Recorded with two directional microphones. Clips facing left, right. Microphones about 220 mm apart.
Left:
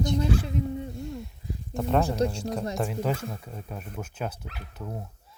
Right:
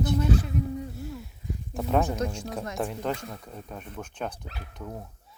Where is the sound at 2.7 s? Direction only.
5° left (ahead or behind).